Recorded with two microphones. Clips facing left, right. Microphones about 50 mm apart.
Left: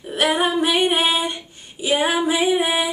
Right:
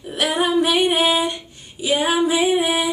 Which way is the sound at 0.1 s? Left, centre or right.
Centre.